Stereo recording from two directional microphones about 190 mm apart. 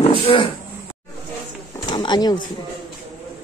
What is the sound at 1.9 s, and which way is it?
Speech, 25° left (ahead or behind).